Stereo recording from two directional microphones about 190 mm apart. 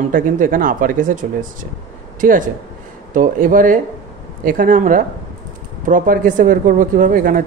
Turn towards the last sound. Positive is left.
turn(degrees=-45)  # may be behind; listen again after turning